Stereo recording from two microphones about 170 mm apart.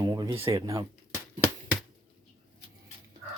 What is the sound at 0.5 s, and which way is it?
Speech, 20° right (ahead or behind).